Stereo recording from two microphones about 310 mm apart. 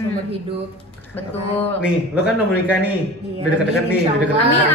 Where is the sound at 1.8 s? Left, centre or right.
Centre.